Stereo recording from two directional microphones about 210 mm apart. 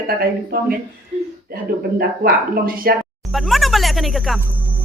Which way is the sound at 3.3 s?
Centre (ahead or behind).